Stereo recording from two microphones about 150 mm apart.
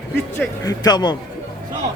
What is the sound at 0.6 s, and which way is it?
Speech, 25° left (ahead or behind).